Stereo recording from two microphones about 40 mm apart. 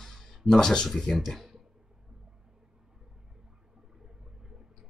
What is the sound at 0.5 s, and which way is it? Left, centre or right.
Speech, centre.